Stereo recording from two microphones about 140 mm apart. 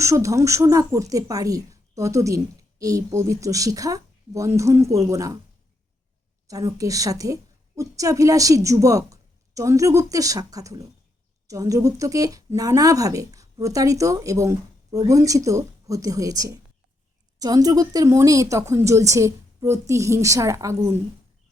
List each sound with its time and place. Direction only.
0.0 s speech: 20° right (ahead or behind)
6.5 s speech: 25° right (ahead or behind)